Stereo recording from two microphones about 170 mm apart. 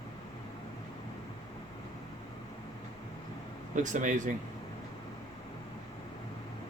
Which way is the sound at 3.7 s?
45° right (ahead or behind).